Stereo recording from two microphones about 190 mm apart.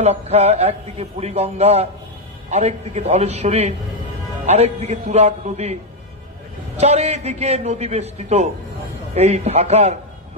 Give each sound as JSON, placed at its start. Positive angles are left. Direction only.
{"t": 0.0, "sound": "a man's voice", "side_deg": -35}
{"t": 6.8, "sound": "a man's voice", "side_deg": -35}